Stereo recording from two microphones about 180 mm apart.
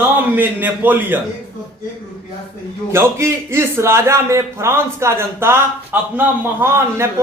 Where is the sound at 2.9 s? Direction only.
15° right (ahead or behind).